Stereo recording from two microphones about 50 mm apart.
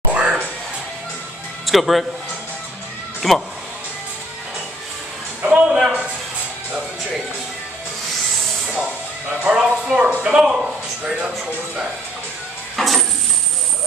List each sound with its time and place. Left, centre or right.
0.1 s music: right
1.7 s speech: centre
3.2 s speech: centre
5.4 s speech: right
9.5 s a man's voice: centre
12.7 s a sound: centre